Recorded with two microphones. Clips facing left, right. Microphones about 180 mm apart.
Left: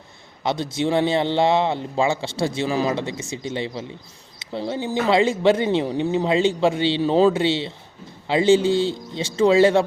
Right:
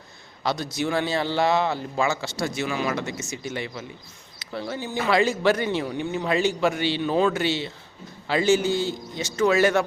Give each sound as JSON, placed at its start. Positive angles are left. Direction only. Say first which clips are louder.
{"t": 0.4, "sound": "speech", "louder": "left 3 dB", "side_deg": 25}